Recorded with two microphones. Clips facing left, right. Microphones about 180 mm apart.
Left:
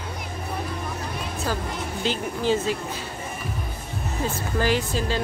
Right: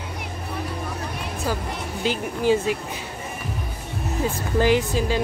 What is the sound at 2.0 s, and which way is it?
Speech, 10° right (ahead or behind).